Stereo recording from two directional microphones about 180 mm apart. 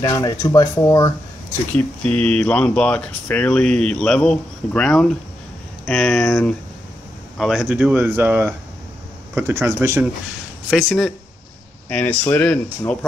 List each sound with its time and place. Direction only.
0.0 s speech: 20° left (ahead or behind); by 10.0 s 15° right (ahead or behind)
10.7 s speech: centre (ahead or behind)